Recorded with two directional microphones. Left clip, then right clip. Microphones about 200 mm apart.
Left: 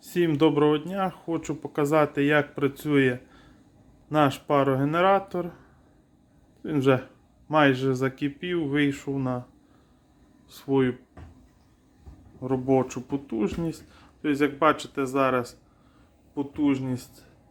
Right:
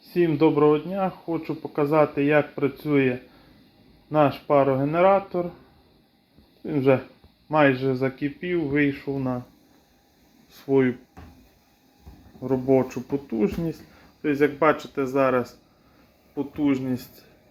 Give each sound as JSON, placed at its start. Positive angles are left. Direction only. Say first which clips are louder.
{"t": 0.1, "sound": "speech", "louder": "right 2 dB", "side_deg": 15}
{"t": 6.6, "sound": "speech", "louder": "right 2 dB", "side_deg": 20}
{"t": 10.5, "sound": "speech", "louder": "right 3 dB", "side_deg": 10}
{"t": 12.4, "sound": "speech", "louder": "right 3 dB", "side_deg": 10}